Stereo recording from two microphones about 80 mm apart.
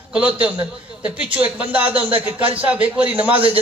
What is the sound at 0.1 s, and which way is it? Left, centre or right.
A man's voice, centre.